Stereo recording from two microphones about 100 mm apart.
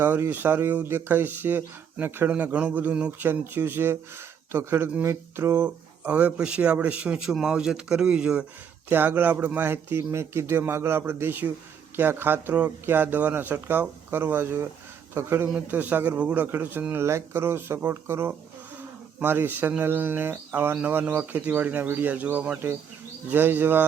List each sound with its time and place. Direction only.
0.0 s speech: 20° right (ahead or behind)
8.9 s speech: 20° right (ahead or behind)